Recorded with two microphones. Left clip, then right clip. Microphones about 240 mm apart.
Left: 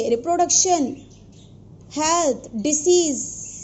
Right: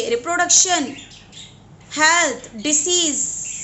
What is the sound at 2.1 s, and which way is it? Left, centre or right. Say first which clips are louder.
A woman's voice: right 2 dB; centre.